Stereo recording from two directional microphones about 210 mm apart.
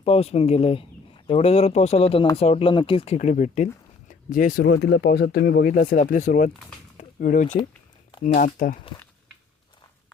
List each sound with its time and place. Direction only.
0.0 s speech: 30° left (ahead or behind)
6.9 s a sound: 40° left (ahead or behind)
8.2 s speech: 40° left (ahead or behind)